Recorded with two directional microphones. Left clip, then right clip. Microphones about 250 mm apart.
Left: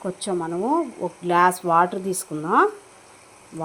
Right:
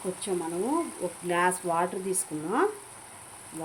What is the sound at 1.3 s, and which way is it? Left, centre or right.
Cutlery, centre.